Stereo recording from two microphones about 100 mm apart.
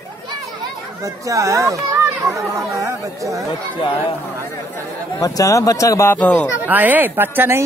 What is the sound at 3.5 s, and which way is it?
Speech, 50° left (ahead or behind).